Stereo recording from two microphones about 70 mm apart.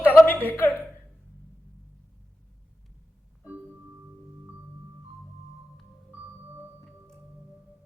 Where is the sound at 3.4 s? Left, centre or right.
Right.